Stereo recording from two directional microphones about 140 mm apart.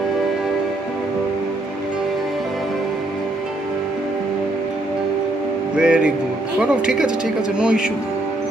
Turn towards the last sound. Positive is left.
turn(degrees=-5)  # may be behind; listen again after turning